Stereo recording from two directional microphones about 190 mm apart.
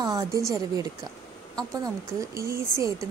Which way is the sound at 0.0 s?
20° right (ahead or behind).